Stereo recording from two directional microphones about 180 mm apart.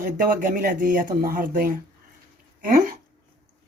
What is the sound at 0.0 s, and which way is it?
Speech, 50° right (ahead or behind).